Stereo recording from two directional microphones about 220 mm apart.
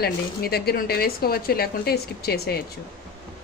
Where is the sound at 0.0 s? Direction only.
45° left (ahead or behind).